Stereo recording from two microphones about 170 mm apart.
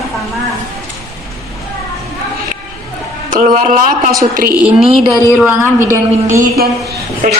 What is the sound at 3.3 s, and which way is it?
Speech, 50° right (ahead or behind).